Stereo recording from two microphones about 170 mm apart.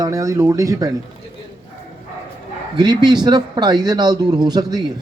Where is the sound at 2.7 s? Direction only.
25° right (ahead or behind).